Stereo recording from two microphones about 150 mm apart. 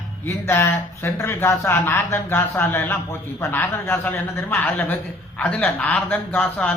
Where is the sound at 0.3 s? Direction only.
15° left (ahead or behind).